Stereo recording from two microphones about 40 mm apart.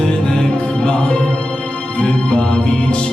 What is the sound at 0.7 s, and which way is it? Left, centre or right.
Music, left.